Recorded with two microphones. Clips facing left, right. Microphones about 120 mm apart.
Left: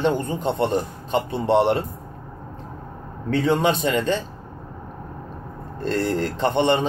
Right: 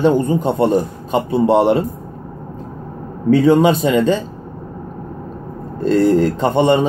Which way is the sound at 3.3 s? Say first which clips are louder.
Right 8 dB; 10° right (ahead or behind).